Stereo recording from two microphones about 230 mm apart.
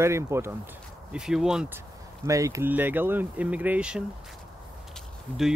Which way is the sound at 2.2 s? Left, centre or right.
Centre.